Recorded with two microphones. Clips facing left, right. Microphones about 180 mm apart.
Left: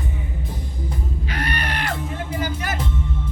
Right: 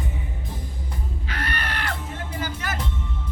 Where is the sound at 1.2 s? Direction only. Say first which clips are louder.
Left 3 dB; 15° left (ahead or behind).